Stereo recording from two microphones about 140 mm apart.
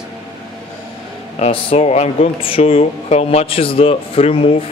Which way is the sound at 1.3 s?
50° left (ahead or behind).